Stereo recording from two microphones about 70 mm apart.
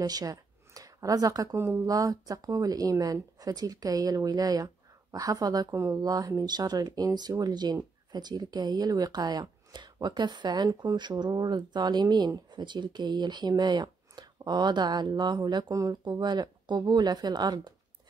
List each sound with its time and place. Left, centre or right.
0.0 s speech: right
1.9 s speech: right
15.7 s speech: right
16.0 s speech: right